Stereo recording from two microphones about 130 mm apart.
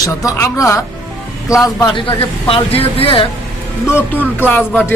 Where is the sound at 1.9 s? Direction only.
45° left (ahead or behind).